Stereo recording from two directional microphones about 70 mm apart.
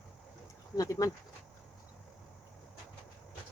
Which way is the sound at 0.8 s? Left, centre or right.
Left.